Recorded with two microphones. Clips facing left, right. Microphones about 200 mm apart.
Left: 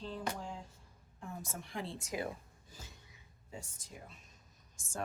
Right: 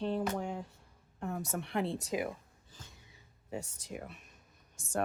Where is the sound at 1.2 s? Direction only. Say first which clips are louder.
Right 8 dB; 65° right (ahead or behind).